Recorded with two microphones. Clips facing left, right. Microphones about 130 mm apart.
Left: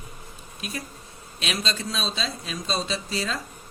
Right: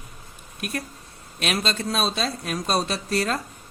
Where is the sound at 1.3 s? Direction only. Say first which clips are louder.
Right 4 dB; 50° right (ahead or behind).